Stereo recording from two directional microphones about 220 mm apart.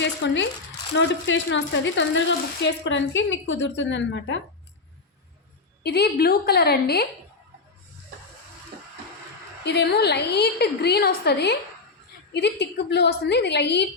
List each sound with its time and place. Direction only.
0.2 s speech: 55° left (ahead or behind)
5.8 s a woman's voice: 45° left (ahead or behind)
9.6 s a woman's voice: 50° left (ahead or behind)